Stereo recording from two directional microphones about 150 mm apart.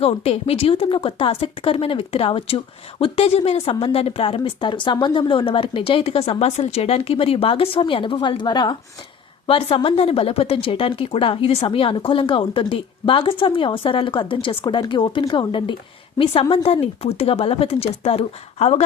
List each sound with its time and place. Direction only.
0.0 s speech: 40° left (ahead or behind)